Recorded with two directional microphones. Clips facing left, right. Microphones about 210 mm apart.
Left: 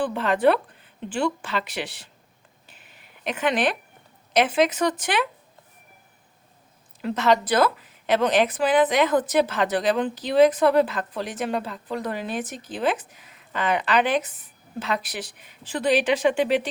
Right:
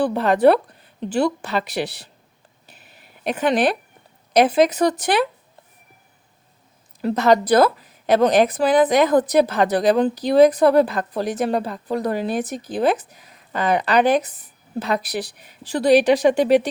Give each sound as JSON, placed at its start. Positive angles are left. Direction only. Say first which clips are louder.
{"t": 0.0, "sound": "a woman's voice", "louder": "right 5 dB", "side_deg": -40}
{"t": 2.7, "sound": "a sound", "louder": "right 3 dB", "side_deg": -35}
{"t": 4.4, "sound": "a woman's voice", "louder": "right 5 dB", "side_deg": -40}
{"t": 7.0, "sound": "a woman's voice", "louder": "right 5 dB", "side_deg": -40}